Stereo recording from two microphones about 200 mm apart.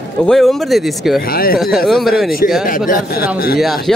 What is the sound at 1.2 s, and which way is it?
Speech, 45° left (ahead or behind).